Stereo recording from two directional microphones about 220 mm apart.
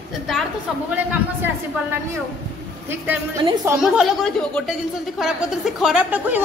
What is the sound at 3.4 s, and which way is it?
Speech, 20° right (ahead or behind).